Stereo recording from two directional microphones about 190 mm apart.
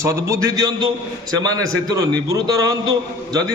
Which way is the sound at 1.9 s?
20° right (ahead or behind).